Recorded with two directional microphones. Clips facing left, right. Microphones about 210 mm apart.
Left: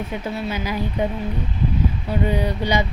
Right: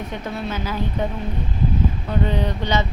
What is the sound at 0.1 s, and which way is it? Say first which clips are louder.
Speech: left 1 dB; 10° left (ahead or behind).